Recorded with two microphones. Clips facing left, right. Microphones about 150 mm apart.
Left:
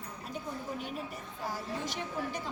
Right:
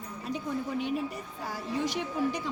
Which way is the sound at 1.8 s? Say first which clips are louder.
Right 7 dB; 50° left (ahead or behind).